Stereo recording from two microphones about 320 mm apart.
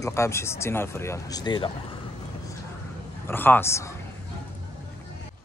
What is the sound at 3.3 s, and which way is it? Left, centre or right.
Speech, centre.